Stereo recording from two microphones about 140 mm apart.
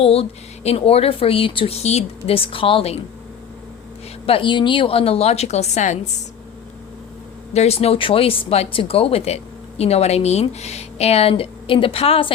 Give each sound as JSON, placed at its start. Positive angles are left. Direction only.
{"t": 0.0, "sound": "speech", "side_deg": 45}
{"t": 4.3, "sound": "speech", "side_deg": 35}
{"t": 7.5, "sound": "speech", "side_deg": 50}